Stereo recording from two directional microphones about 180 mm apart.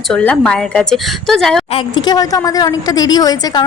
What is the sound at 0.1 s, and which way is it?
A woman's voice, 5° left (ahead or behind).